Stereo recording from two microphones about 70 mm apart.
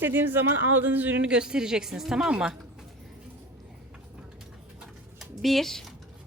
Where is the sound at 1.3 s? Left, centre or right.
Centre.